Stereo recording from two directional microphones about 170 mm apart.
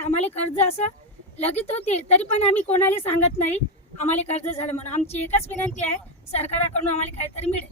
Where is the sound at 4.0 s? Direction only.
40° left (ahead or behind).